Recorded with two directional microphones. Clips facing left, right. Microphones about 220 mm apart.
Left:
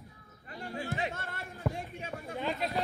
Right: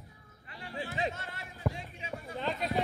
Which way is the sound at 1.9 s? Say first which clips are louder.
Left 1 dB; 50° left (ahead or behind).